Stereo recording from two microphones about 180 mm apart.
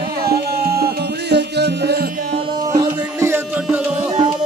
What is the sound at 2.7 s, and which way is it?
Music, 25° right (ahead or behind).